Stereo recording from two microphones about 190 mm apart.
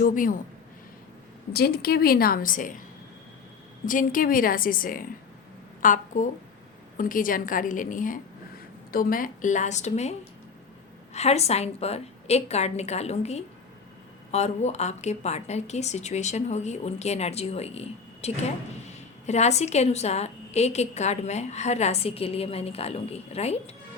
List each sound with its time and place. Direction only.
0.0 s a woman's voice: 45° left (ahead or behind)
1.5 s a woman's voice: 55° left (ahead or behind)
3.8 s a woman's voice: 45° left (ahead or behind)